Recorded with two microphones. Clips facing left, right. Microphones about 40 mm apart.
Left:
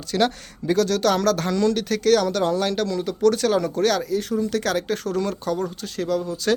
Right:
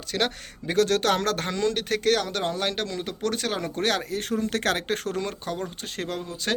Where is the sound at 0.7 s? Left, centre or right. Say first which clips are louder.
Left 2 dB; right.